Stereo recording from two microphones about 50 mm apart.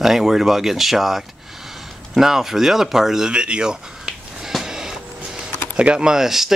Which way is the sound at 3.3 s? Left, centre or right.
Right.